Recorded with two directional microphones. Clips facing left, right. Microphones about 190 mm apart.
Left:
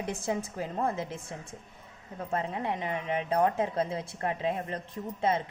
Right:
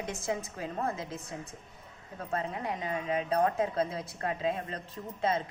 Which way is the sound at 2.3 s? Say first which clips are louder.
Left 2 dB; 25° left (ahead or behind).